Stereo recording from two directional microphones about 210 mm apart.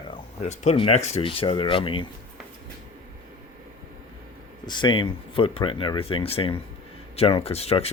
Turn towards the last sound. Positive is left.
turn(degrees=30)  # may be behind; listen again after turning